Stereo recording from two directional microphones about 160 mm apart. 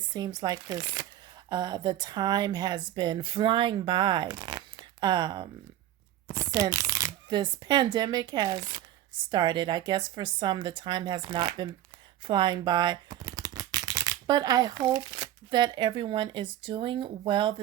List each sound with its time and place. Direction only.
0.1 s speech: 25° right (ahead or behind)